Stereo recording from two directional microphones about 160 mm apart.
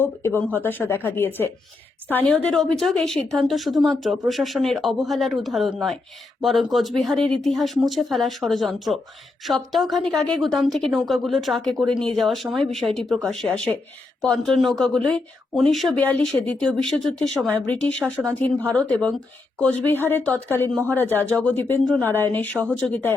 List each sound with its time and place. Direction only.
0.0 s speech: 15° left (ahead or behind)
18.0 s speech: 15° right (ahead or behind)
18.7 s speech: 10° left (ahead or behind)